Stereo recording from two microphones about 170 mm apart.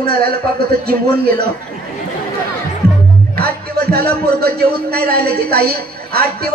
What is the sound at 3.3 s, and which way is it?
Speech, 65° right (ahead or behind).